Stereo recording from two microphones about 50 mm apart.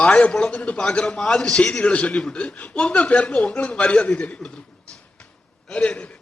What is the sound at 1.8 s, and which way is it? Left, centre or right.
Speech, left.